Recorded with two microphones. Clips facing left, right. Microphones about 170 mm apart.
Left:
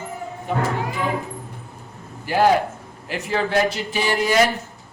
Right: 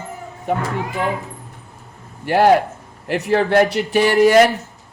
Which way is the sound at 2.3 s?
65° right (ahead or behind).